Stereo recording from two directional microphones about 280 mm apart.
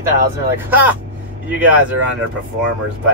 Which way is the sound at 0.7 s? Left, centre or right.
Centre.